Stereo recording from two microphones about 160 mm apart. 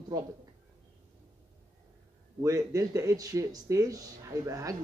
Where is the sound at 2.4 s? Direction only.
20° right (ahead or behind).